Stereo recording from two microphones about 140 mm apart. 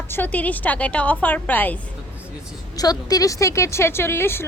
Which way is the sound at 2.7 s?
25° left (ahead or behind).